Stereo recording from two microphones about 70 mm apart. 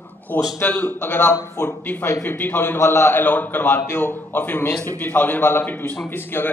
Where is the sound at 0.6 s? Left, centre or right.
Left.